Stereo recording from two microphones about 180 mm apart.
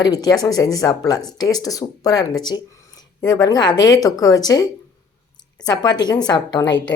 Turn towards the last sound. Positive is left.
turn(degrees=20)  # may be behind; listen again after turning